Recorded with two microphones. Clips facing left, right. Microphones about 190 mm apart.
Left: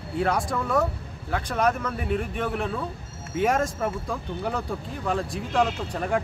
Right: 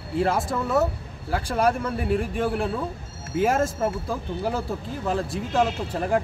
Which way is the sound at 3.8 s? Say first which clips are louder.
Right 2 dB; 30° right (ahead or behind).